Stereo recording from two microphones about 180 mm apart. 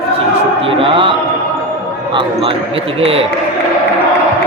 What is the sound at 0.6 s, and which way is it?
Speech, 30° right (ahead or behind).